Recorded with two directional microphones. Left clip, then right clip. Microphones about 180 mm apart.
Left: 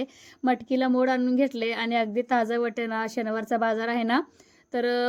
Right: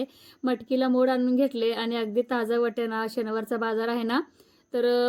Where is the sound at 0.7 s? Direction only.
15° left (ahead or behind).